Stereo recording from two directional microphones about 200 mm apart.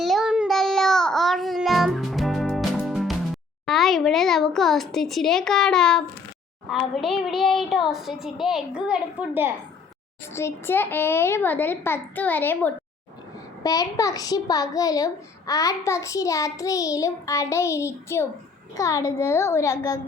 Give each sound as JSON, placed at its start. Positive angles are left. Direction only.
{"t": 0.0, "sound": "child singing", "side_deg": 0}
{"t": 3.7, "sound": "a child's voice", "side_deg": 0}
{"t": 10.3, "sound": "a child's voice", "side_deg": 10}